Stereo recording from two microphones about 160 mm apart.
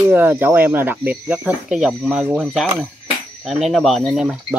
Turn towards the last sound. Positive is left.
turn(degrees=0)  # may be behind; listen again after turning